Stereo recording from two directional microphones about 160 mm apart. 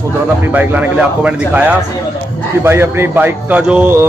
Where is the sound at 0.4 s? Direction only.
10° right (ahead or behind).